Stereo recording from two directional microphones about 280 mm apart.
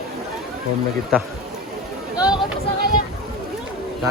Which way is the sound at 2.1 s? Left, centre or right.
Centre.